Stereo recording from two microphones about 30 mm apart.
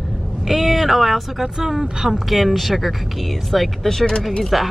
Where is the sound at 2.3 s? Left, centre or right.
Centre.